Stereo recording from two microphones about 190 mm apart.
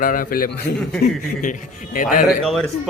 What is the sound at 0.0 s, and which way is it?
A man's voice, 45° left (ahead or behind).